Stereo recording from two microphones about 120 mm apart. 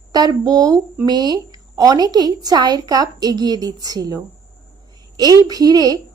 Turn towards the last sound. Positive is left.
turn(degrees=-30)  # may be behind; listen again after turning